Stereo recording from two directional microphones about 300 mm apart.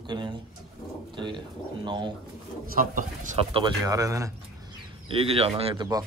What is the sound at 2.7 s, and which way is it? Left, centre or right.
Speech, right.